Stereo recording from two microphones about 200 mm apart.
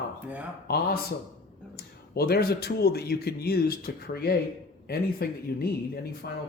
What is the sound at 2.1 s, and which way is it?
Speech, 50° left (ahead or behind).